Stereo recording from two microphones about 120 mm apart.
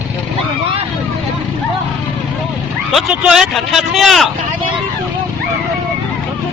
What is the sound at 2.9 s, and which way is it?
Speech, 5° right (ahead or behind).